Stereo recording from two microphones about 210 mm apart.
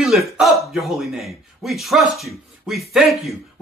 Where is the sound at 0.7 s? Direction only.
Centre (ahead or behind).